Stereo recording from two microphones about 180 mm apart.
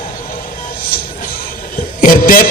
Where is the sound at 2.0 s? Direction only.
50° left (ahead or behind).